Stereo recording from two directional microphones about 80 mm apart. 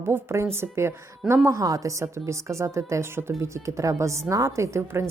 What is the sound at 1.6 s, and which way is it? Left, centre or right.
A woman's voice, right.